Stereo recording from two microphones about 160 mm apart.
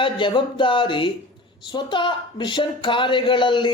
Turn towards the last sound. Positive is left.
turn(degrees=30)  # may be behind; listen again after turning